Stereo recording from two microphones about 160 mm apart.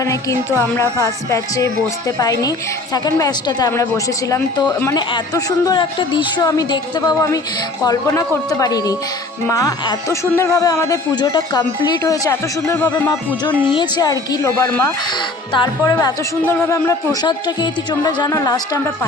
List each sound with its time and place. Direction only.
0.0 s music: 20° left (ahead or behind)
0.8 s speech: 20° left (ahead or behind)
4.9 s speech: 25° left (ahead or behind)
13.7 s speech: 25° left (ahead or behind)
14.6 s speech: 15° left (ahead or behind)